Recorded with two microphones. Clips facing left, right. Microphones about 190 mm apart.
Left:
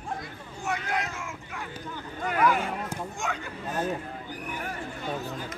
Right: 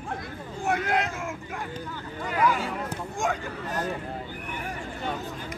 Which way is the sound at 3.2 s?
45° right (ahead or behind).